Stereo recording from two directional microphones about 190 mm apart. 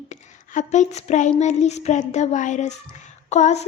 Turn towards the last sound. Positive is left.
turn(degrees=35)  # may be behind; listen again after turning